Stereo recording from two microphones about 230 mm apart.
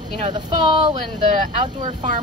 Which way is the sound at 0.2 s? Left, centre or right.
Right.